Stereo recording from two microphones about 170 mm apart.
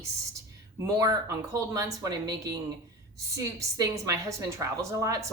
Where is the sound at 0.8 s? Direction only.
20° right (ahead or behind).